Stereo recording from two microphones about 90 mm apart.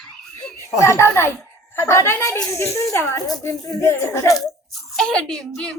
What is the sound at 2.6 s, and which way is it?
Speech, 35° left (ahead or behind).